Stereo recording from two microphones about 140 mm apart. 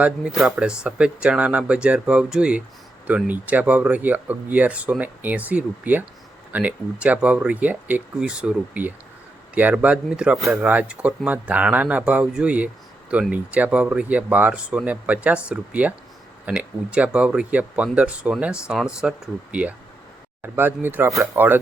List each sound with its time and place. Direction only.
0.0 s speech: 5° right (ahead or behind)